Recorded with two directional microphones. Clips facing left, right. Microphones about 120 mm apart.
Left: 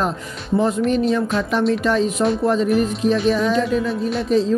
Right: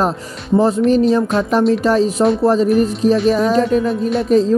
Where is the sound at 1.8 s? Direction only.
35° right (ahead or behind).